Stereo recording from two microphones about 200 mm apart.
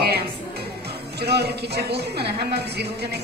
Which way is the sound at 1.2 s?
55° right (ahead or behind).